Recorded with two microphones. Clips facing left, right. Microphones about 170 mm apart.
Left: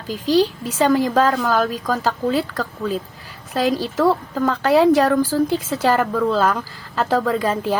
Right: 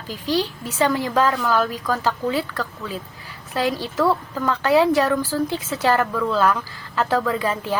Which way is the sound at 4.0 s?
40° left (ahead or behind).